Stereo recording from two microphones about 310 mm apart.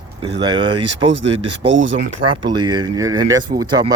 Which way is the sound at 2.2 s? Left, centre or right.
Centre.